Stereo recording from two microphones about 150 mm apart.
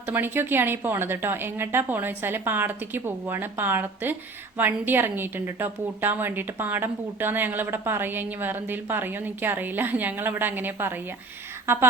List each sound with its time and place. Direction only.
0.1 s a woman's voice: 15° right (ahead or behind)